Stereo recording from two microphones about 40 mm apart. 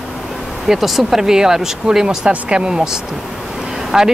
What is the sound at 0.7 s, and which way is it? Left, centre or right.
Speech, centre.